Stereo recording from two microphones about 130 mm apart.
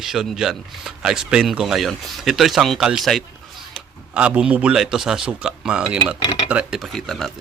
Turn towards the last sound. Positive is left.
turn(degrees=5)  # may be behind; listen again after turning